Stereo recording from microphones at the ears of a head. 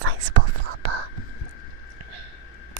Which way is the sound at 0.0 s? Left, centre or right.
Right.